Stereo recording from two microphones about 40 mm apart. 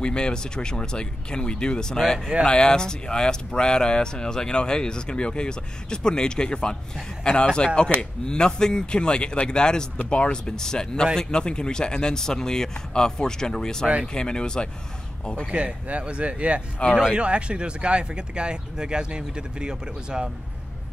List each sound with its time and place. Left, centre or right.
0.0 s speech: left
10.4 s speech: centre
15.5 s speech: right
16.9 s speech: centre
17.2 s speech: right